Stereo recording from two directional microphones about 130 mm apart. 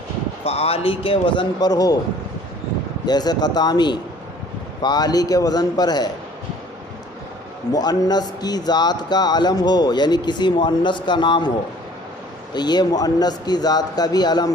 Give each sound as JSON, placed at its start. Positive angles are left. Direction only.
{"t": 0.4, "sound": "a man's voice", "side_deg": 50}
{"t": 3.1, "sound": "speech", "side_deg": 30}
{"t": 7.7, "sound": "speech", "side_deg": 30}
{"t": 12.5, "sound": "speech", "side_deg": 35}